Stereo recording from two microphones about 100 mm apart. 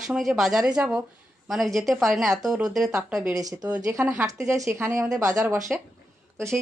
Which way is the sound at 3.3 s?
40° right (ahead or behind).